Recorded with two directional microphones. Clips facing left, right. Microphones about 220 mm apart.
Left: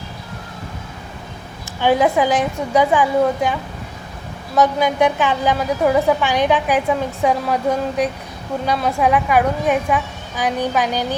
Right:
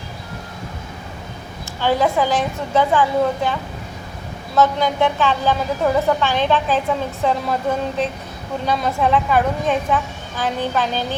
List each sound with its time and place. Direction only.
1.8 s a woman's voice: 15° left (ahead or behind)